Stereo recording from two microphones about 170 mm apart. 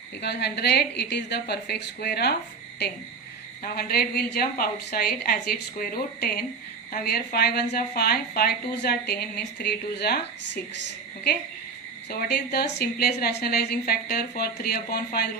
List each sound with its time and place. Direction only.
0.2 s a woman's voice: 75° left (ahead or behind)
3.6 s a woman's voice: 65° left (ahead or behind)
12.3 s a woman's voice: 75° left (ahead or behind)